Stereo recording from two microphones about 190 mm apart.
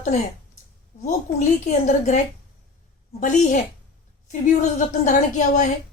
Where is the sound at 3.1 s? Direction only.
40° left (ahead or behind).